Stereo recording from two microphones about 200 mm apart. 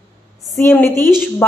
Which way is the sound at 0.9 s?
20° right (ahead or behind).